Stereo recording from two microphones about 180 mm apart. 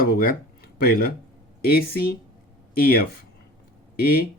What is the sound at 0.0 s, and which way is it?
Speech, 50° left (ahead or behind).